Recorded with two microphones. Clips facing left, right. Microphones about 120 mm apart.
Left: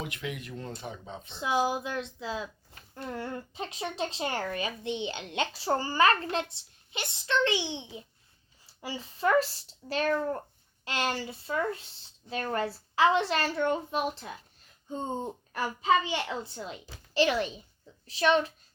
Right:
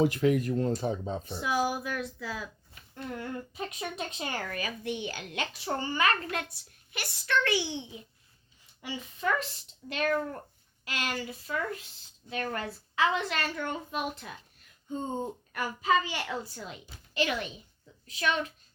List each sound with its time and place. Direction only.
0.0 s speech: 40° right (ahead or behind)
1.4 s a woman's voice: 25° left (ahead or behind)
2.7 s a woman's voice: 35° left (ahead or behind)
8.6 s a woman's voice: 35° left (ahead or behind)